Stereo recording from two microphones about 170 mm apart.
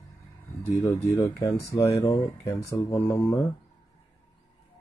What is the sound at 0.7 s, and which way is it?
Speech, 15° left (ahead or behind).